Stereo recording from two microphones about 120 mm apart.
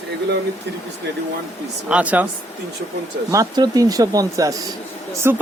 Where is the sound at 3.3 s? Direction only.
30° right (ahead or behind).